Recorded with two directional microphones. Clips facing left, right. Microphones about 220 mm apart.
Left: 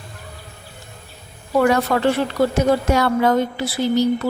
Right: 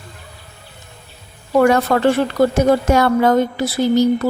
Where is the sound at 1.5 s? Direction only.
50° right (ahead or behind).